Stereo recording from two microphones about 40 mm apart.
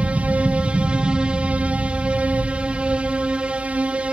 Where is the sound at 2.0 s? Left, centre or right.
Right.